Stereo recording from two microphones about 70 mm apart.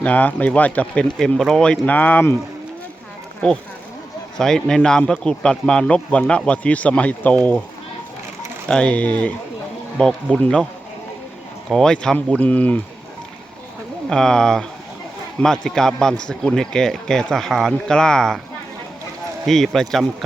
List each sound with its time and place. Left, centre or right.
0.0 s speech: left
1.4 s speech: centre
1.6 s speech: centre
4.4 s a man's voice: centre
8.6 s a man's voice: centre
11.7 s a man's voice: centre
12.4 s speech: left
14.1 s a man's voice: centre
19.5 s speech: centre